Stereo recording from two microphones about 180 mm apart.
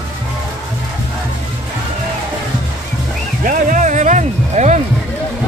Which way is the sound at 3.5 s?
45° right (ahead or behind).